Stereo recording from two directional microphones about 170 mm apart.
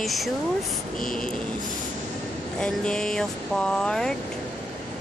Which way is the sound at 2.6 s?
5° left (ahead or behind).